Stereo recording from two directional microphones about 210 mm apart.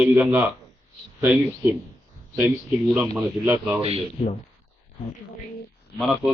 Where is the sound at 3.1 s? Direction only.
5° right (ahead or behind).